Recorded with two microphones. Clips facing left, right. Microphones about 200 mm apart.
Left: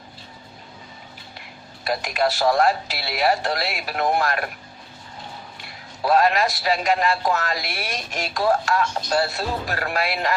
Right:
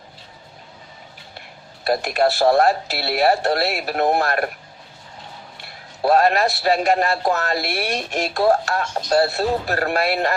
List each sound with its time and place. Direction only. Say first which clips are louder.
1.8 s speech: right 4 dB; 40° right (ahead or behind)
6.0 s speech: right 2 dB; 40° right (ahead or behind)